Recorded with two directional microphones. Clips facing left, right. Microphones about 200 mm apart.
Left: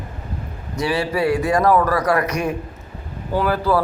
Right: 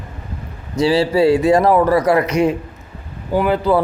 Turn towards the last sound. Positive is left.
turn(degrees=-20)  # may be behind; listen again after turning